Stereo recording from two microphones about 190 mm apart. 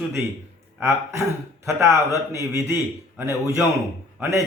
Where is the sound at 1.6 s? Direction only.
15° right (ahead or behind).